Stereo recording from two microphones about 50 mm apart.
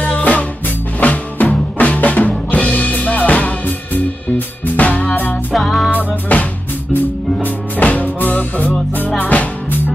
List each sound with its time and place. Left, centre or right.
0.0 s music: left
5.5 s music: centre
5.9 s music: left
7.8 s music: left